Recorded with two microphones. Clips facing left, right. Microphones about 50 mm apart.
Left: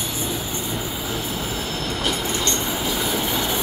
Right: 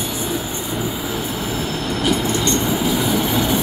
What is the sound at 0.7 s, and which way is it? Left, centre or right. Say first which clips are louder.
Train: right 7 dB; centre.